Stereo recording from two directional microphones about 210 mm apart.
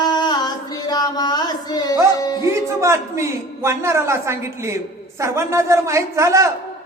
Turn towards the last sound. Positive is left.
turn(degrees=-15)  # may be behind; listen again after turning